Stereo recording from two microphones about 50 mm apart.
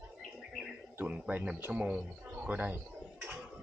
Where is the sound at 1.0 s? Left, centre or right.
Right.